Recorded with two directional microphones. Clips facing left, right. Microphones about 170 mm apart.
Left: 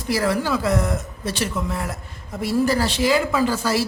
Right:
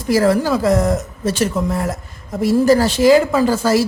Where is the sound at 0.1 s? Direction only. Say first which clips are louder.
Right 7 dB; 40° right (ahead or behind).